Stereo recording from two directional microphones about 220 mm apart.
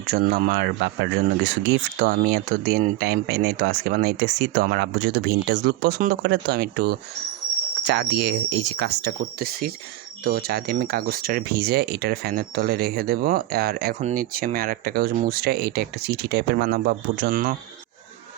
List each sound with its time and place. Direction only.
0.1 s speech: 45° right (ahead or behind)